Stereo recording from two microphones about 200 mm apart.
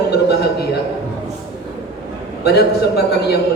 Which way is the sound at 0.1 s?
55° left (ahead or behind).